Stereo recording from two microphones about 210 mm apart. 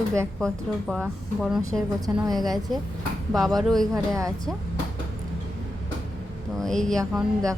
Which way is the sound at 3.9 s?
15° right (ahead or behind).